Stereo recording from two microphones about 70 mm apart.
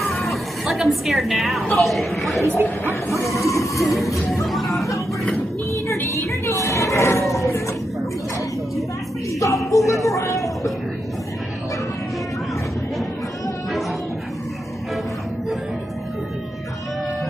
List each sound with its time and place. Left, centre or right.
0.0 s music: centre
1.8 s speech: centre
2.6 s speech: left
3.4 s music: left
5.9 s roar: left
7.3 s a sound: left
9.4 s a sound: left